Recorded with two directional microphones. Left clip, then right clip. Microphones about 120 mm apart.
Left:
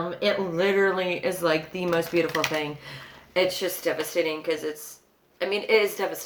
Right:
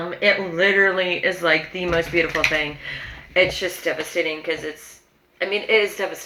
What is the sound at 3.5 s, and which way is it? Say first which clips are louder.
Speech: right 3 dB; 40° left (ahead or behind).